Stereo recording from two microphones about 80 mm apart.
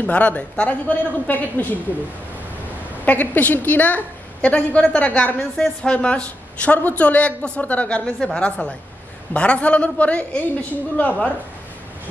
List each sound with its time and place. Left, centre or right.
0.0 s a man's voice: centre
3.1 s a woman's voice: centre